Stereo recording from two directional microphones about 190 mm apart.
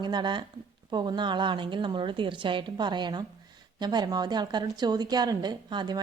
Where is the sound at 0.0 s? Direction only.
25° right (ahead or behind).